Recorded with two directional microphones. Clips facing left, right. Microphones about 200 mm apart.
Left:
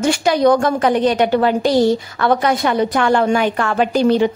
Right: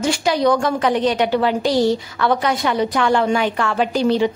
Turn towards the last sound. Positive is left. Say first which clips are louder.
# left 3 dB
turn(degrees=50)  # may be behind; listen again after turning